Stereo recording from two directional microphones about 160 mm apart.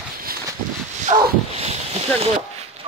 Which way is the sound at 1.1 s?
45° right (ahead or behind).